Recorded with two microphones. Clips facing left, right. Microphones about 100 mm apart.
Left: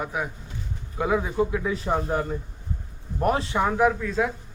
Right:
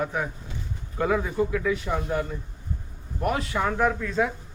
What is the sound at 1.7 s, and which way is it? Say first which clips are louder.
A man's voice: left 1 dB; 35° left (ahead or behind).